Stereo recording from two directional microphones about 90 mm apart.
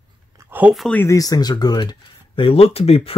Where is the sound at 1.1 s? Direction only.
45° left (ahead or behind).